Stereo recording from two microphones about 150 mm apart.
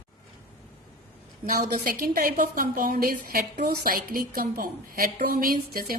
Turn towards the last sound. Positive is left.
turn(degrees=-70)  # may be behind; listen again after turning